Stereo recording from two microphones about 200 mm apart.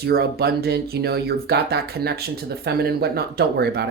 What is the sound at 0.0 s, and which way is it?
Speech, 50° right (ahead or behind).